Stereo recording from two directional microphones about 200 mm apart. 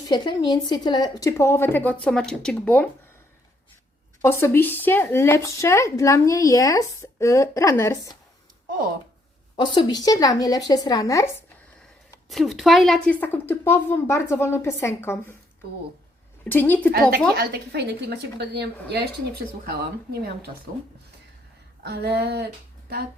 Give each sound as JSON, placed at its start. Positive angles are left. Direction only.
{"t": 0.1, "sound": "speech", "side_deg": 20}
{"t": 4.2, "sound": "speech", "side_deg": 10}
{"t": 9.6, "sound": "speech", "side_deg": 20}
{"t": 12.3, "sound": "speech", "side_deg": 0}
{"t": 16.4, "sound": "speech", "side_deg": 10}
{"t": 16.9, "sound": "a woman's voice", "side_deg": -50}
{"t": 21.8, "sound": "speech", "side_deg": -55}